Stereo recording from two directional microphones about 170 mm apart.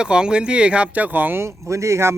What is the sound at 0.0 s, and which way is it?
Speech, 5° right (ahead or behind).